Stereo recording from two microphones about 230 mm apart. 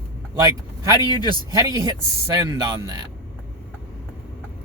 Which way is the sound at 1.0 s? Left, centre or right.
Centre.